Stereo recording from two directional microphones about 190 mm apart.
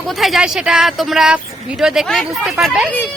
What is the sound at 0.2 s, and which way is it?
Speech, centre (ahead or behind).